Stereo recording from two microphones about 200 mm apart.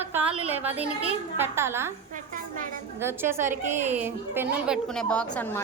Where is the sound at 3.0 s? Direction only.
10° right (ahead or behind).